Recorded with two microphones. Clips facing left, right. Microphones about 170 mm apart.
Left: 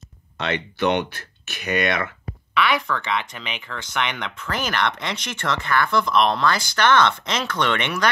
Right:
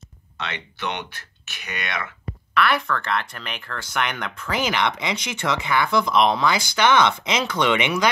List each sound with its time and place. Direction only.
0.4 s speech: 40° left (ahead or behind)
2.5 s speech: centre (ahead or behind)